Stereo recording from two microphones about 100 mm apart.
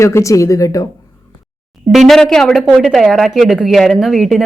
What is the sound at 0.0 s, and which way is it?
Speech, 30° left (ahead or behind).